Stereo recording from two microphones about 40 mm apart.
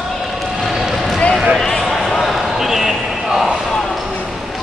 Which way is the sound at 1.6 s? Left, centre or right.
Centre.